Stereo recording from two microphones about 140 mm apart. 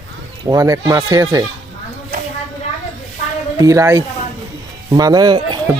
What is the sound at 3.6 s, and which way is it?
A man's voice, 20° right (ahead or behind).